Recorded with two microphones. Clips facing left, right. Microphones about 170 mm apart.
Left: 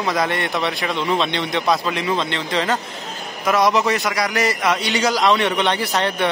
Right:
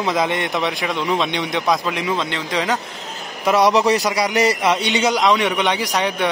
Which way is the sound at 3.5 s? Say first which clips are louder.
Right 3 dB; 30° right (ahead or behind).